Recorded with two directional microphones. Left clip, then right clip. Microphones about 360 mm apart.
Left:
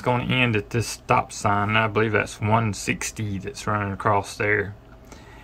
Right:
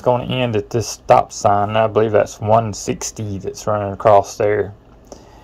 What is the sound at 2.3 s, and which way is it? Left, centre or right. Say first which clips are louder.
Speech: right 8 dB; centre.